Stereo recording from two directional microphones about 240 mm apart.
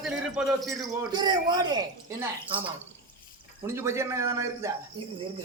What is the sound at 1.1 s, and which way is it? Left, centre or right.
Speech, centre.